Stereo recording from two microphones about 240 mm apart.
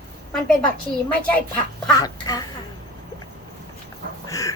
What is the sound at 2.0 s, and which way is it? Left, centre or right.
Speech, centre.